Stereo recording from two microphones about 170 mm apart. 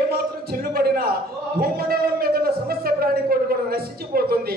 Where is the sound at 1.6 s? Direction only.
60° right (ahead or behind).